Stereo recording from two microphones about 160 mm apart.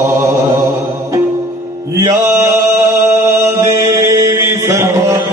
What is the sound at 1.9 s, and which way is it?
Mantra, 20° right (ahead or behind).